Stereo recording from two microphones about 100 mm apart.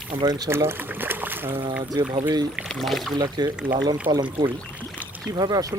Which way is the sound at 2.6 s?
5° left (ahead or behind).